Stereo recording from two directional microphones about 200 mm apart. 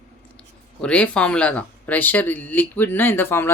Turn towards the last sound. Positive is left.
turn(degrees=10)  # may be behind; listen again after turning